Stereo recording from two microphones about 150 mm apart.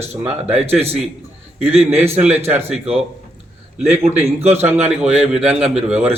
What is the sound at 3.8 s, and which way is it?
Speech, 15° right (ahead or behind).